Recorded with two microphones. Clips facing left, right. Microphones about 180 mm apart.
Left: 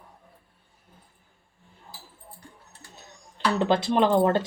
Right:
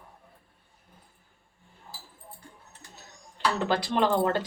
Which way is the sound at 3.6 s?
20° left (ahead or behind).